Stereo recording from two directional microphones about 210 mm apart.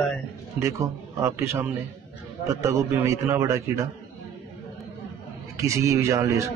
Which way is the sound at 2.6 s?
15° right (ahead or behind).